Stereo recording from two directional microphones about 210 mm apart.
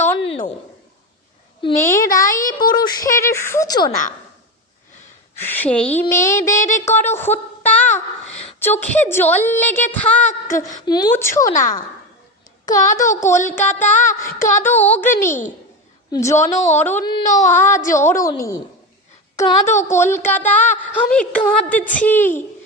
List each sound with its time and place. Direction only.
0.3 s a sound: 25° left (ahead or behind)
1.6 s a woman's voice: 15° left (ahead or behind)
5.4 s a woman's voice: 10° left (ahead or behind)
6.6 s a child's voice: 35° left (ahead or behind)
6.8 s a woman's voice: 10° left (ahead or behind)
10.8 s a woman's voice: 20° left (ahead or behind)
12.6 s a woman's voice: 15° left (ahead or behind)
15.3 s a child's voice: 35° left (ahead or behind)
16.1 s a woman's voice: 15° left (ahead or behind)
17.2 s a child's voice: 35° left (ahead or behind)
17.5 s a woman's voice: 10° left (ahead or behind)